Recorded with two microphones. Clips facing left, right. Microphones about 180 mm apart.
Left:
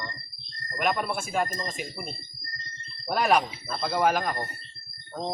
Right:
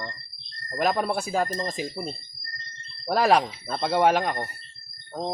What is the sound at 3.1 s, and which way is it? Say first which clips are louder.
Speech: right 3 dB; 30° right (ahead or behind).